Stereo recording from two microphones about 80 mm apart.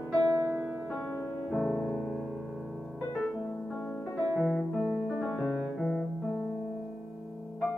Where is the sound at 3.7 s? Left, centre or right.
Centre.